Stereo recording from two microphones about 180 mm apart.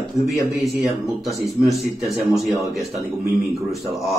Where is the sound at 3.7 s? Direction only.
Centre (ahead or behind).